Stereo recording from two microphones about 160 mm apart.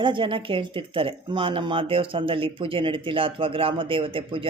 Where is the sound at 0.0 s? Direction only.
30° right (ahead or behind).